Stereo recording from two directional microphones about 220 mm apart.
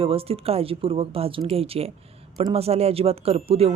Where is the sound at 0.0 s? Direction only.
25° right (ahead or behind).